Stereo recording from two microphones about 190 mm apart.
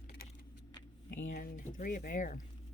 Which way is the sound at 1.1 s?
50° left (ahead or behind).